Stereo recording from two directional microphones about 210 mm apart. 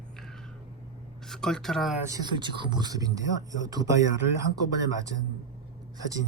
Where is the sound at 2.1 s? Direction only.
20° right (ahead or behind).